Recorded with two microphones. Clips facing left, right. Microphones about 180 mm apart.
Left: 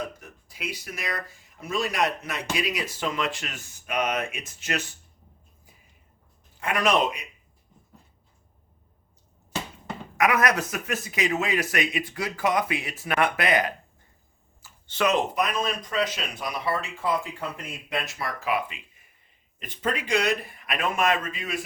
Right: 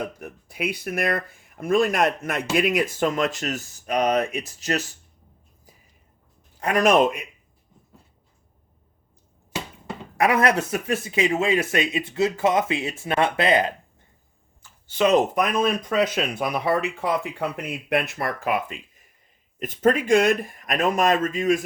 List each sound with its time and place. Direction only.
0.0 s speech: 60° right (ahead or behind); by 4.8 s 35° right (ahead or behind)
6.6 s speech: 40° right (ahead or behind)
10.2 s speech: 30° right (ahead or behind)
14.6 s a sound: 5° left (ahead or behind)
15.1 s speech: 50° right (ahead or behind)